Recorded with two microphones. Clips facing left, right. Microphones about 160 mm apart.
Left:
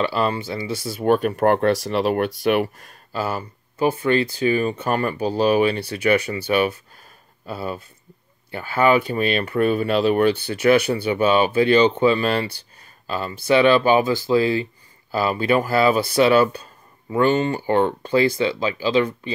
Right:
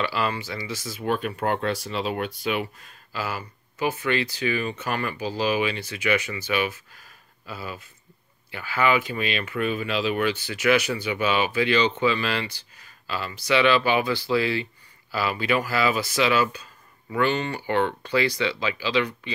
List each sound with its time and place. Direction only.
0.0 s speech: 30° left (ahead or behind)
1.0 s speech: 45° left (ahead or behind)
5.9 s speech: 35° left (ahead or behind)
6.4 s speech: 45° left (ahead or behind)
8.5 s speech: 50° left (ahead or behind)